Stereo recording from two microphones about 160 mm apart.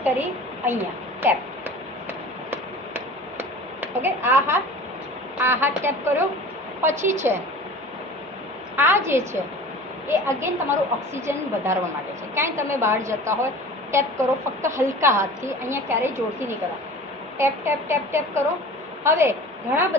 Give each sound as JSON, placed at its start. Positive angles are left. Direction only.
{"t": 0.0, "sound": "a woman's voice", "side_deg": -15}
{"t": 1.2, "sound": "a sound", "side_deg": -15}
{"t": 5.4, "sound": "a woman's voice", "side_deg": -15}
{"t": 8.7, "sound": "a woman's voice", "side_deg": -15}
{"t": 14.6, "sound": "a woman's voice", "side_deg": -15}
{"t": 17.3, "sound": "a woman's voice", "side_deg": -15}